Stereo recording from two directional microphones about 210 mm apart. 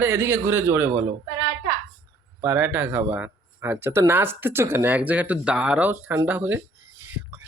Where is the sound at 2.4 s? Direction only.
10° right (ahead or behind).